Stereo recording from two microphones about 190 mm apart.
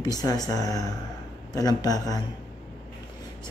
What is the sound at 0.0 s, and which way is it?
Speech, 20° left (ahead or behind).